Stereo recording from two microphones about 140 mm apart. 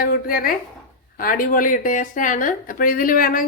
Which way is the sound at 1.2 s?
80° left.